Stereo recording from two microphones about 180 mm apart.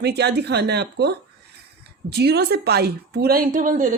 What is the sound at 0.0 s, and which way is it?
Speech, 65° right (ahead or behind).